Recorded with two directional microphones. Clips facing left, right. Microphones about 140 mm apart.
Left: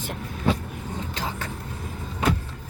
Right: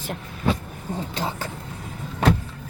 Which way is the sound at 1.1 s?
30° right (ahead or behind).